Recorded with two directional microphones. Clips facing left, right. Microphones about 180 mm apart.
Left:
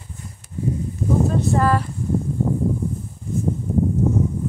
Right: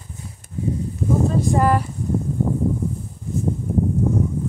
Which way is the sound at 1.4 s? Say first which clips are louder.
Right 1 dB; 15° right (ahead or behind).